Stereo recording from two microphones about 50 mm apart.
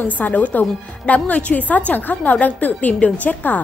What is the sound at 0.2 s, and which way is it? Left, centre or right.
A woman's voice, left.